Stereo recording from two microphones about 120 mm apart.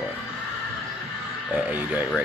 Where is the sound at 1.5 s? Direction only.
15° right (ahead or behind).